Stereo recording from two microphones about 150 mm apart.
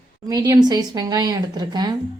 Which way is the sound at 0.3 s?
25° right (ahead or behind).